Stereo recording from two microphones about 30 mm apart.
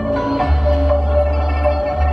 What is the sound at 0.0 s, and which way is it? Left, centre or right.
Music, centre.